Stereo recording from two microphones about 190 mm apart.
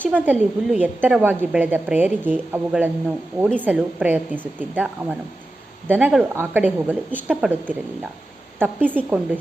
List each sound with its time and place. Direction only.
0.0 s a woman's voice: 10° right (ahead or behind)
8.5 s a woman's voice: 10° right (ahead or behind)